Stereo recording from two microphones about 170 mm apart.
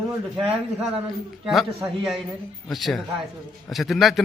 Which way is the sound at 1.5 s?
Centre (ahead or behind).